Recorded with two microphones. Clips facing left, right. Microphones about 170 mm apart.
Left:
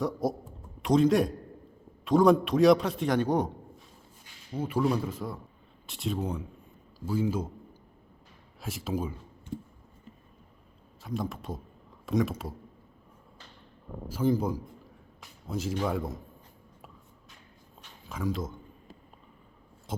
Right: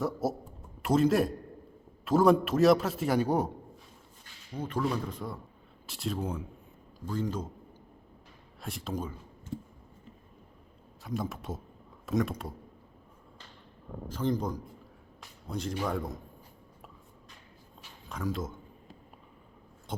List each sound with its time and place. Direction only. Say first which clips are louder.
0.0 s a man's voice: left 1 dB; 5° right (ahead or behind)
4.5 s a man's voice: left 4 dB; 5° left (ahead or behind)
8.6 s speech: left 3 dB; 5° left (ahead or behind)
11.0 s a man's voice: left 1 dB; centre (ahead or behind)
14.1 s a man's voice: left 4 dB; 5° left (ahead or behind)
18.1 s a man's voice: left 2 dB; centre (ahead or behind)
19.9 s a sound: left 2 dB; centre (ahead or behind)